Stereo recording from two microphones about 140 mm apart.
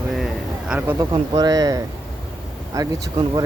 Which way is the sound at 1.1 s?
30° right (ahead or behind).